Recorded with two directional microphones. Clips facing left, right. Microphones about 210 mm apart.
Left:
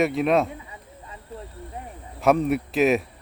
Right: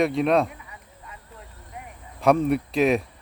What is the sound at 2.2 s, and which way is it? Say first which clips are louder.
Speech: even; centre (ahead or behind).